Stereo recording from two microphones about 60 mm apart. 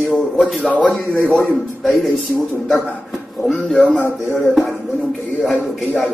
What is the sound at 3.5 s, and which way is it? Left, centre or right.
Speech, left.